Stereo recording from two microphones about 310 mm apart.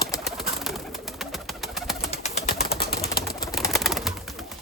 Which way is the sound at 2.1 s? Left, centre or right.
Left.